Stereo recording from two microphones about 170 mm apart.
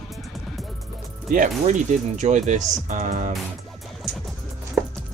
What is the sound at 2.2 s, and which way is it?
Speech, 45° right (ahead or behind).